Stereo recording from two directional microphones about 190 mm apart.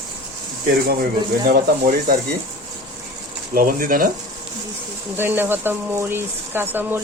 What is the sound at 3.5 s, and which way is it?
Speech, 50° right (ahead or behind).